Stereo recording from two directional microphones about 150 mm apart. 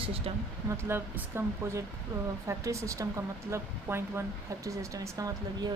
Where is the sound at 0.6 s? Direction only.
15° right (ahead or behind).